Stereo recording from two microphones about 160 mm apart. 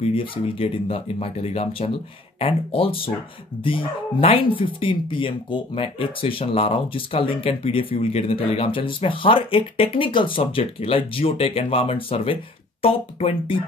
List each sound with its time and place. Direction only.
0.0 s speech: 35° left (ahead or behind)